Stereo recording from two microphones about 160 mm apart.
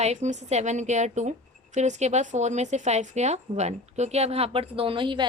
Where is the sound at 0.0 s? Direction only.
45° right (ahead or behind).